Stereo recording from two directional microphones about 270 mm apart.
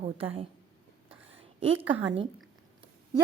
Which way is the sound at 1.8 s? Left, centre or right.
Centre.